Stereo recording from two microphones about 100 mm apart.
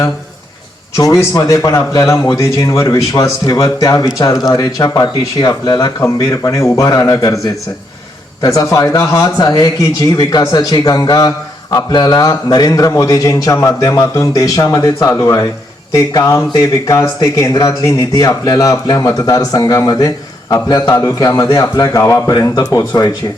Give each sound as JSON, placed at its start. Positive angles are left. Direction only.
{"t": 0.9, "sound": "a man's voice", "side_deg": 30}